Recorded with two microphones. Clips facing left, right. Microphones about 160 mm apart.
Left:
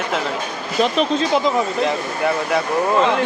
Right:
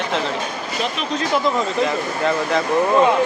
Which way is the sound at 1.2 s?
20° left (ahead or behind).